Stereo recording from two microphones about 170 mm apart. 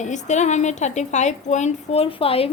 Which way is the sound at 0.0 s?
45° left (ahead or behind).